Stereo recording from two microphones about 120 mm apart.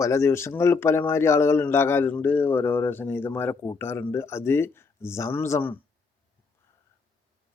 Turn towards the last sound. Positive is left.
turn(degrees=20)  # may be behind; listen again after turning